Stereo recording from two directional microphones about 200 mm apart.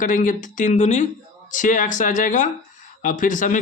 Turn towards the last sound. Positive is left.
turn(degrees=40)  # may be behind; listen again after turning